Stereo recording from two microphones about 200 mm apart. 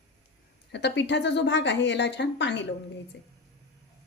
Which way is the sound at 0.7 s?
60° left (ahead or behind).